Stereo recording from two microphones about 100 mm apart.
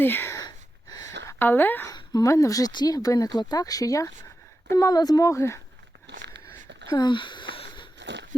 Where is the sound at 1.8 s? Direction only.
40° left (ahead or behind).